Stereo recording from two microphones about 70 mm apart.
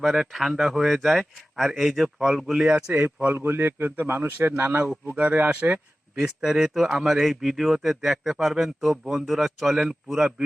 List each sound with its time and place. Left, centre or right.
0.0 s a man's voice: centre
2.5 s speech: centre
3.3 s a man's voice: right
5.1 s speech: right
6.4 s a man's voice: centre